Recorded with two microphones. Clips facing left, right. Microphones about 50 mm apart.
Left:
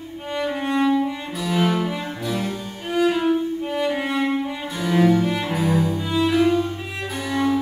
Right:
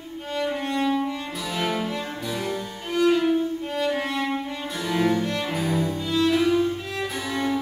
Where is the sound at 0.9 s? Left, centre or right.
Centre.